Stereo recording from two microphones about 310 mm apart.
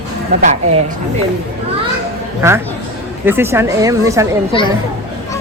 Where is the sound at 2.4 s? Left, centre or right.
Centre.